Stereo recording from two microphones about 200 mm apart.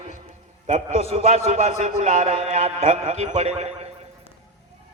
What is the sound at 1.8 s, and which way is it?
A man's voice, 40° right (ahead or behind).